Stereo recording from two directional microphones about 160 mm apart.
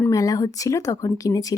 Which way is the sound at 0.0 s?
20° left (ahead or behind).